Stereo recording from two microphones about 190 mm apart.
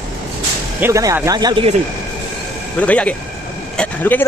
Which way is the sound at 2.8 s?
5° left (ahead or behind).